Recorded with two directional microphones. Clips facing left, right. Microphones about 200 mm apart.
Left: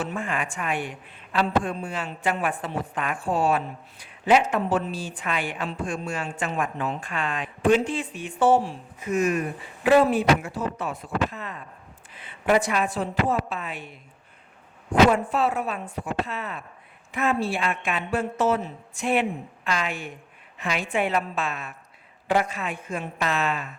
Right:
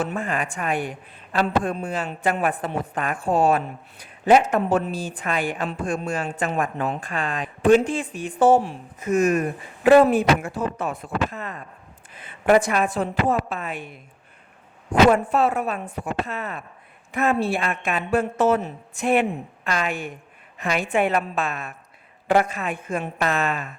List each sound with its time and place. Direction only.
0.2 s a woman's voice: 40° right (ahead or behind)
7.1 s speech: 35° right (ahead or behind)
15.1 s speech: 55° right (ahead or behind)